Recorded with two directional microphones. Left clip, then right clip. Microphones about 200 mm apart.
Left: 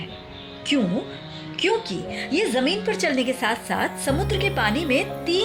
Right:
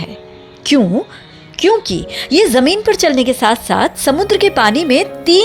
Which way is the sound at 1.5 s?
40° right (ahead or behind).